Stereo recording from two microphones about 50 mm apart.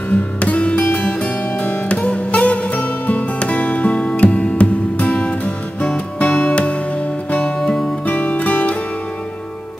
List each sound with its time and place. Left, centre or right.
0.1 s music: left
8.1 s music: left